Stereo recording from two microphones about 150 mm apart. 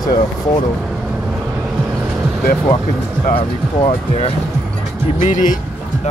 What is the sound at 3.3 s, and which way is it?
Speech, 40° left (ahead or behind).